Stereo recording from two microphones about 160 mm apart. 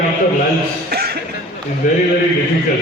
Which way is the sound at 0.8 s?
75° right (ahead or behind).